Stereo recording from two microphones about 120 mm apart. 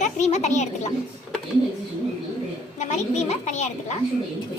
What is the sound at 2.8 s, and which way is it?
A woman's voice, 70° left (ahead or behind).